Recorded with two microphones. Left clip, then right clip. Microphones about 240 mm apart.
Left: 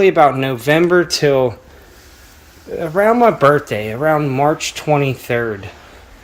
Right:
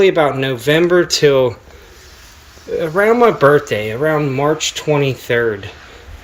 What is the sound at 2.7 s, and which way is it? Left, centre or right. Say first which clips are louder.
Speech: right 1 dB; centre.